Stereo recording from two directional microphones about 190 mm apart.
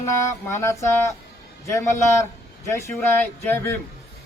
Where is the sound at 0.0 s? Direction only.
15° left (ahead or behind).